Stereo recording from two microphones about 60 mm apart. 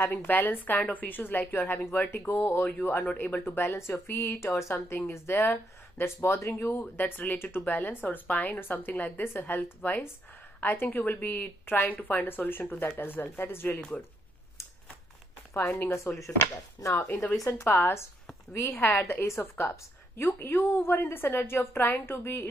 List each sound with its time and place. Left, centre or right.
0.0 s speech: left
3.1 s speech: left
4.5 s speech: left
4.7 s speech: left
6.8 s a woman's voice: left
15.5 s speech: left
16.9 s speech: left